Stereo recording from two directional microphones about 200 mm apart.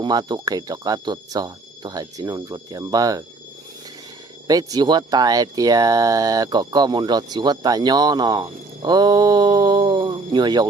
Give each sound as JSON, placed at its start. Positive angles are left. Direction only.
{"t": 0.0, "sound": "speech", "side_deg": -20}
{"t": 4.4, "sound": "speech", "side_deg": -20}